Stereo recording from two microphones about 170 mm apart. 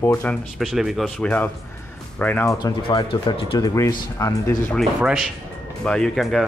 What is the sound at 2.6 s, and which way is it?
Speech, 25° left (ahead or behind).